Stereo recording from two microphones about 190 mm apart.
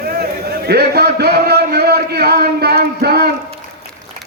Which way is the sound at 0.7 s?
55° right (ahead or behind).